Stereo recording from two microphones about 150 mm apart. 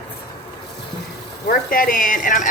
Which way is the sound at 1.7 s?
70° left (ahead or behind).